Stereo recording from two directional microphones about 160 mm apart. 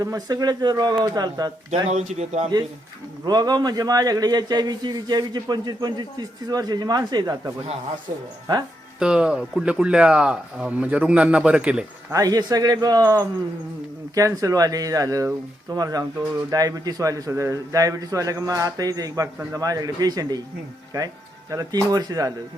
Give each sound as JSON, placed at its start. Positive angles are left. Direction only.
{"t": 0.0, "sound": "a man's voice", "side_deg": -25}
{"t": 1.7, "sound": "speech", "side_deg": -45}
{"t": 3.2, "sound": "a man's voice", "side_deg": -25}
{"t": 9.0, "sound": "speech", "side_deg": -5}
{"t": 12.1, "sound": "a man's voice", "side_deg": -20}
{"t": 21.5, "sound": "a man's voice", "side_deg": -25}